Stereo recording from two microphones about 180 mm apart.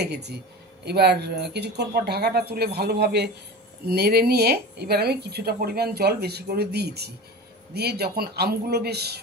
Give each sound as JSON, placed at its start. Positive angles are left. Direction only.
{"t": 0.0, "sound": "speech", "side_deg": -65}